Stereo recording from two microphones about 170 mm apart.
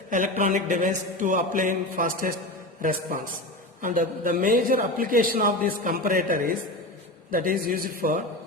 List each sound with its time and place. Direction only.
0.1 s mantra: 50° right (ahead or behind)
3.8 s a man's voice: 55° right (ahead or behind)